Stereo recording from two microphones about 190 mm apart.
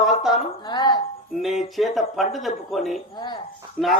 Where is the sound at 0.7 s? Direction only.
25° left (ahead or behind).